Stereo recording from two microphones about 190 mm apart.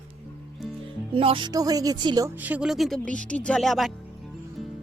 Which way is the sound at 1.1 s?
25° right (ahead or behind).